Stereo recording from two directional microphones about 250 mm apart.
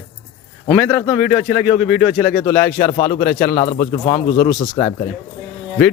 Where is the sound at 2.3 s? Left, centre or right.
Centre.